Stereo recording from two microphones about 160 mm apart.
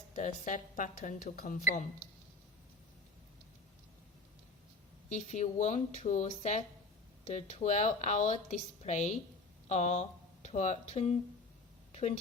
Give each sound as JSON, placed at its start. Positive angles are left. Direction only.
{"t": 0.1, "sound": "a woman's voice", "side_deg": 50}
{"t": 5.3, "sound": "a woman's voice", "side_deg": 50}
{"t": 11.9, "sound": "a sound", "side_deg": 40}